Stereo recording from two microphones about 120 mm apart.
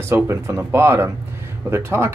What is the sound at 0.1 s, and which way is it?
Speech, 20° right (ahead or behind).